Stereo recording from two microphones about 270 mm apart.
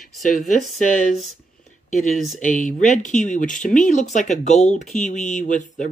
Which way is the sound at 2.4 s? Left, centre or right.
Left.